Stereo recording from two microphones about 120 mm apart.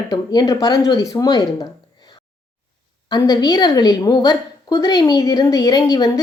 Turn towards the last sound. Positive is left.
turn(degrees=35)  # may be behind; listen again after turning